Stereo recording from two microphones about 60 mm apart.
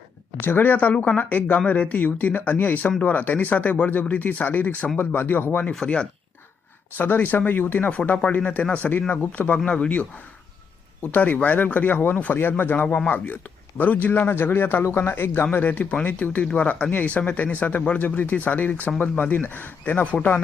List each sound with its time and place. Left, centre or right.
0.3 s speech: left
5.7 s speech: centre
6.9 s speech: left
7.9 s speech: left
9.6 s speech: centre
11.0 s speech: left
15.7 s speech: left